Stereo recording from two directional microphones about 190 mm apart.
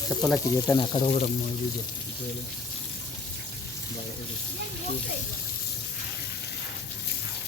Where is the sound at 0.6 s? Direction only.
25° left (ahead or behind).